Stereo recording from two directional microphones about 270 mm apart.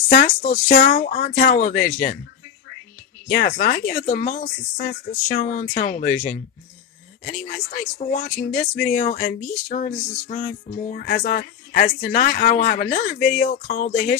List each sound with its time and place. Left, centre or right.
0.1 s speech: left
3.3 s speech: left